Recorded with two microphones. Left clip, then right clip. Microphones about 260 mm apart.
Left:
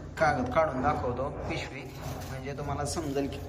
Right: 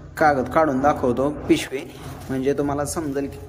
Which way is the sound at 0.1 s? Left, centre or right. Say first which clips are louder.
Right 8 dB; right.